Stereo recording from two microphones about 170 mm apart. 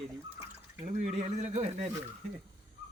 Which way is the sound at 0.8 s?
40° right (ahead or behind).